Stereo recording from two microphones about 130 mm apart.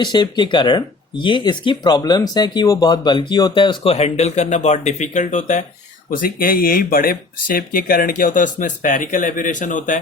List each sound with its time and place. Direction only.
0.0 s speech: 35° left (ahead or behind)
3.9 s speech: 55° left (ahead or behind)
6.1 s speech: 90° left